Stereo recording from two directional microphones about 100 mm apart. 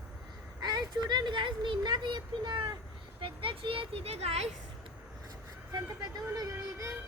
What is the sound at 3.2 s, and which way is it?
Speech, 60° right (ahead or behind).